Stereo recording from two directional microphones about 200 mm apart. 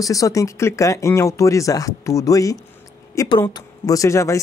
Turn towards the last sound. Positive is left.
turn(degrees=15)  # may be behind; listen again after turning